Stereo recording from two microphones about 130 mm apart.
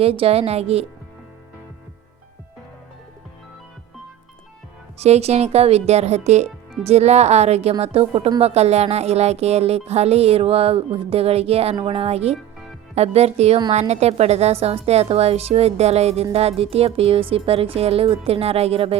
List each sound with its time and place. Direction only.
0.0 s a woman's voice: 50° right (ahead or behind)
4.9 s a woman's voice: 55° right (ahead or behind)